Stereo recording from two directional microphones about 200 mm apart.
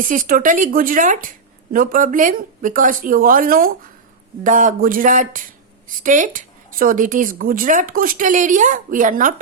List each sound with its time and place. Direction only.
0.1 s speech: 40° right (ahead or behind)